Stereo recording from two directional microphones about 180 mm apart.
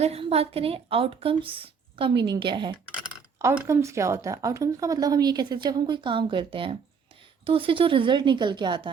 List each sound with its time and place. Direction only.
0.0 s speech: 35° right (ahead or behind)